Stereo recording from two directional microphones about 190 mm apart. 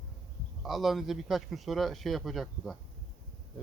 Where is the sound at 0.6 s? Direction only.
Centre (ahead or behind).